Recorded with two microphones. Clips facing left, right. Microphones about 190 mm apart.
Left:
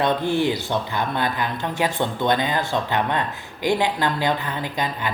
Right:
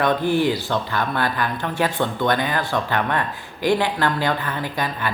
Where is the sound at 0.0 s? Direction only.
20° left (ahead or behind).